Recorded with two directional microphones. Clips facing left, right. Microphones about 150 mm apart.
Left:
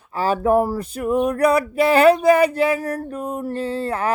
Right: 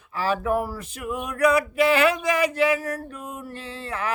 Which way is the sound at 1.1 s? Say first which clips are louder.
Left 4 dB; 35° left (ahead or behind).